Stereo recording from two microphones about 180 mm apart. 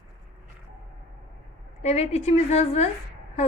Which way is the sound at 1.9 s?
35° left (ahead or behind).